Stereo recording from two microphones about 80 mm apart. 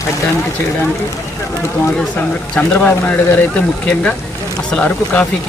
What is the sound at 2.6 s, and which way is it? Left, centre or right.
Speech, left.